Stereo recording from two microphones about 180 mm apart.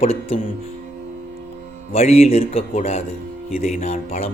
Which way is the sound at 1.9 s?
35° left (ahead or behind).